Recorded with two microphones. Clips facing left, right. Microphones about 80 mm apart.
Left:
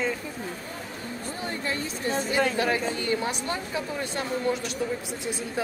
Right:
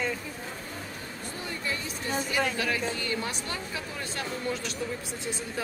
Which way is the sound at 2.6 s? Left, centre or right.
Left.